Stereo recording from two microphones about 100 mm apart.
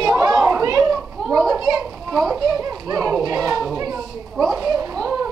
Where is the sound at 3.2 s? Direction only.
35° right (ahead or behind).